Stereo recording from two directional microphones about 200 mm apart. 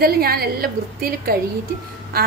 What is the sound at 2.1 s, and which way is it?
Quack, 50° right (ahead or behind).